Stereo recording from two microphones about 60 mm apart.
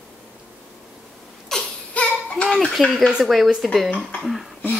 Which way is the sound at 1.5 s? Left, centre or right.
Centre.